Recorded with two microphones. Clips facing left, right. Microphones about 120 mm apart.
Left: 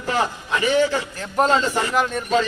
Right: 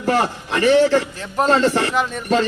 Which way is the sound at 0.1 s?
60° right (ahead or behind).